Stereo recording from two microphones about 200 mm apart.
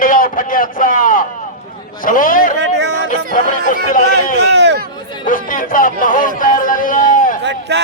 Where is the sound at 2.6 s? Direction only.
55° right (ahead or behind).